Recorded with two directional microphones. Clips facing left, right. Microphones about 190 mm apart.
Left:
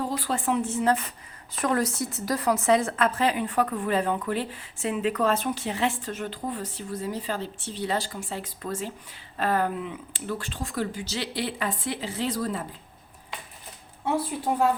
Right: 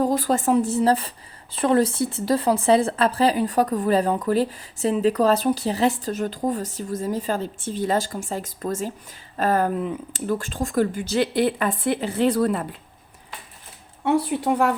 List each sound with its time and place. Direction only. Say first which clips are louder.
0.0 s speech: right 7 dB; 45° right (ahead or behind); by 12.6 s 60° right (ahead or behind)
14.0 s speech: right 6 dB; 70° right (ahead or behind)